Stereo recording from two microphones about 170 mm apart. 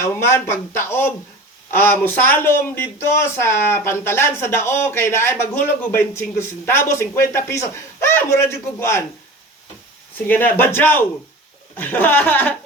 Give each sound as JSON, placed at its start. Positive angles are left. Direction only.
{"t": 0.0, "sound": "speech", "side_deg": 15}
{"t": 10.2, "sound": "speech", "side_deg": 10}